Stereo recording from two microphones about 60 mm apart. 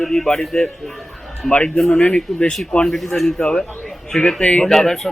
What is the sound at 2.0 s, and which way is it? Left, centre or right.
Speech, centre.